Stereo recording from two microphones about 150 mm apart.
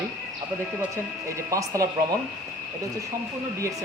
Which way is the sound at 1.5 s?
20° right (ahead or behind).